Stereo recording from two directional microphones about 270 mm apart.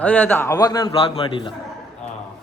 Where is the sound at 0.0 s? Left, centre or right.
Centre.